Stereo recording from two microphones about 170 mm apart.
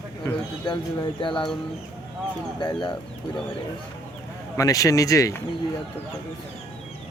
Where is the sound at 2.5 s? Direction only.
25° left (ahead or behind).